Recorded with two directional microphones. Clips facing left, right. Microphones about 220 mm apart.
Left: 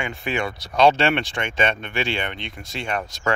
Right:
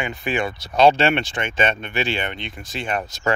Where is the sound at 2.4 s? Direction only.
Centre (ahead or behind).